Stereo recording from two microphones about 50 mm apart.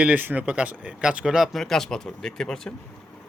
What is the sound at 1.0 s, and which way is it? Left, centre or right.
Speech, centre.